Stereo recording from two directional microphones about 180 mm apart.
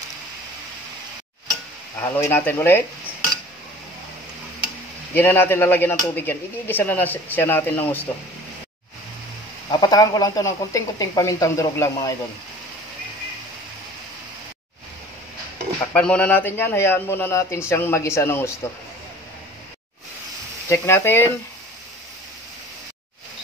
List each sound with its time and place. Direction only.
2.0 s speech: 15° left (ahead or behind)
5.1 s speech: 10° left (ahead or behind)
9.7 s speech: 20° left (ahead or behind)
15.8 s speech: 5° left (ahead or behind)
20.6 s speech: 15° left (ahead or behind)